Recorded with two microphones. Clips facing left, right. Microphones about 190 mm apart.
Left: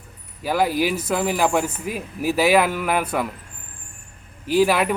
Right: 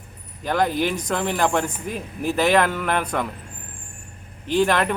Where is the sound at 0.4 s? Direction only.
5° left (ahead or behind).